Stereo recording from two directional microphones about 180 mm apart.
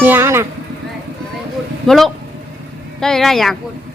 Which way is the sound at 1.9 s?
Centre (ahead or behind).